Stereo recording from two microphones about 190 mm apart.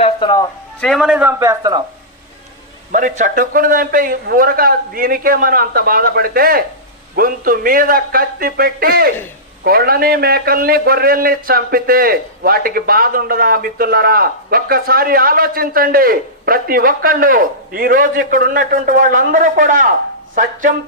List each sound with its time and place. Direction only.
0.0 s speech: 25° left (ahead or behind)
0.8 s a man's voice: centre (ahead or behind); by 1.8 s 20° right (ahead or behind)
2.9 s a man's voice: 45° right (ahead or behind)